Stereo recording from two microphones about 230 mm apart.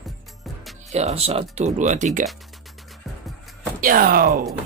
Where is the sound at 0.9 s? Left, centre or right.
Right.